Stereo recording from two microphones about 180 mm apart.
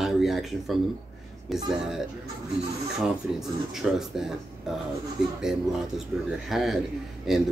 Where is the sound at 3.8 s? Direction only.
Centre (ahead or behind).